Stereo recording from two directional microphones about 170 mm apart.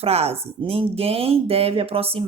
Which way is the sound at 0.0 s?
35° right (ahead or behind).